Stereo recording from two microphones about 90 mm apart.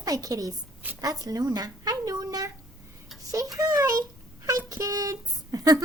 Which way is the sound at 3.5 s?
40° right (ahead or behind).